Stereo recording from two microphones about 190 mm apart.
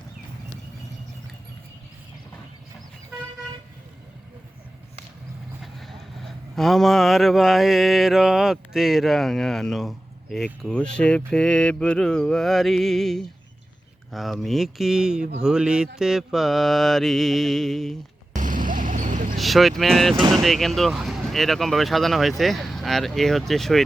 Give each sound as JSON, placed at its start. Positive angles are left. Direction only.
{"t": 5.8, "sound": "speech", "side_deg": 0}
{"t": 18.3, "sound": "vehicle", "side_deg": -45}
{"t": 19.4, "sound": "speech", "side_deg": 0}